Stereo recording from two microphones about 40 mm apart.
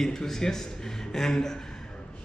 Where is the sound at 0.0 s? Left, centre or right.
Centre.